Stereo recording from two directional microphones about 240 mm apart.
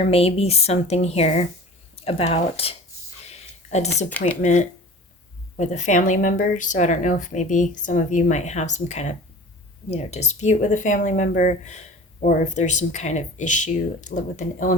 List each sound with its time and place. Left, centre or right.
0.1 s a woman's voice: left
3.2 s a sound: left
4.2 s a woman's voice: left